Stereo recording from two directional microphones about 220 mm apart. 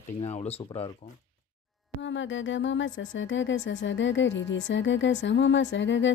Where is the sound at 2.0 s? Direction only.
60° left (ahead or behind).